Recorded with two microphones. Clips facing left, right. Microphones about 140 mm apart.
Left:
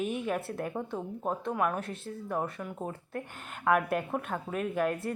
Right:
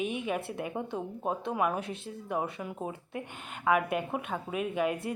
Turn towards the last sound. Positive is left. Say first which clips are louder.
# even
turn(degrees=-5)  # may be behind; listen again after turning